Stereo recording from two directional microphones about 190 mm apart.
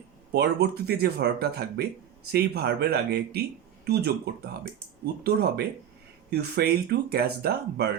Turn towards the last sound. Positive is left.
turn(degrees=-55)  # may be behind; listen again after turning